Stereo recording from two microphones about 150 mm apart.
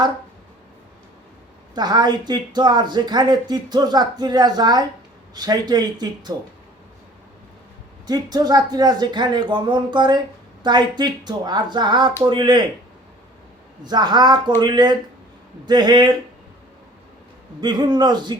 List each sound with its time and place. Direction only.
1.7 s speech: 30° right (ahead or behind)
8.0 s speech: 25° right (ahead or behind)
13.8 s speech: 30° right (ahead or behind)
17.6 s speech: 30° right (ahead or behind)